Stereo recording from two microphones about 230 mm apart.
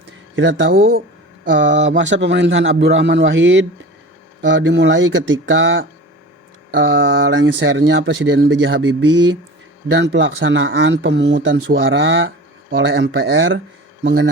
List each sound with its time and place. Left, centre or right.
0.3 s speech: right
9.9 s speech: right
11.9 s speech: right